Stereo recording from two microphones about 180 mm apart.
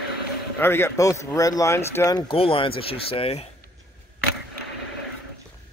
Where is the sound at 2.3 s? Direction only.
30° left (ahead or behind).